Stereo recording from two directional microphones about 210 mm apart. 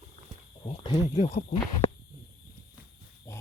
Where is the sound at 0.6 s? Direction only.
25° left (ahead or behind).